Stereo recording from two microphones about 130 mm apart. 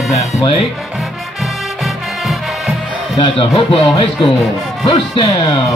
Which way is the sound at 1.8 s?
Centre (ahead or behind).